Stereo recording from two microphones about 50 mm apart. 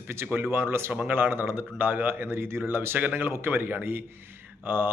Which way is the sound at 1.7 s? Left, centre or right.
Right.